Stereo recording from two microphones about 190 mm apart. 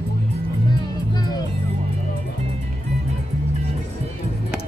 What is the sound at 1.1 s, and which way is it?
Music, 20° left (ahead or behind).